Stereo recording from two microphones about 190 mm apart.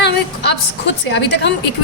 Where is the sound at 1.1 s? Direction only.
65° left (ahead or behind).